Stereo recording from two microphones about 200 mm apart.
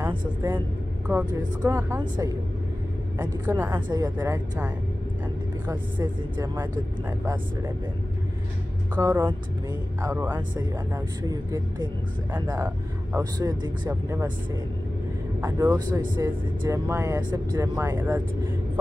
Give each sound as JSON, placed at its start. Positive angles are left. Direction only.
{"t": 0.4, "sound": "speech", "side_deg": -20}
{"t": 3.4, "sound": "speech", "side_deg": -15}
{"t": 5.7, "sound": "speech", "side_deg": -20}
{"t": 8.9, "sound": "speech", "side_deg": -15}
{"t": 15.4, "sound": "speech", "side_deg": -15}